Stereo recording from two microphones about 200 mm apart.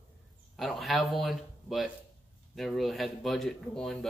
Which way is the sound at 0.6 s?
Centre (ahead or behind).